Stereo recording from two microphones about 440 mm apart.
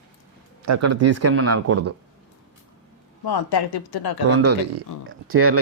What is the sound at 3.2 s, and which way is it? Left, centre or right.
Speech, left.